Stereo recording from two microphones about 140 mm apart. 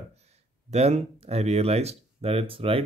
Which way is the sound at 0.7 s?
50° right (ahead or behind).